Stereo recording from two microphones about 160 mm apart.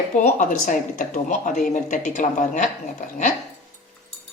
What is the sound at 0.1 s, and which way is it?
Speech, 50° left (ahead or behind).